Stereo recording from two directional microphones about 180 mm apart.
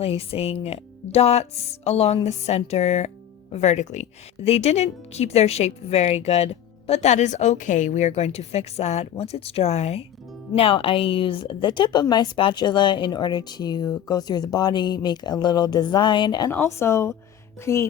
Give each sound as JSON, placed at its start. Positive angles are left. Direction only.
{"t": 0.0, "sound": "a woman's voice", "side_deg": 35}
{"t": 16.5, "sound": "a woman's voice", "side_deg": 15}